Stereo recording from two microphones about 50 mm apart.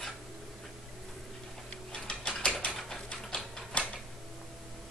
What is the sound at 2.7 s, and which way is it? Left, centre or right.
Bird, centre.